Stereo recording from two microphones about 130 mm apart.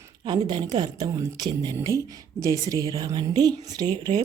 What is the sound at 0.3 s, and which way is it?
Speech, 35° right (ahead or behind).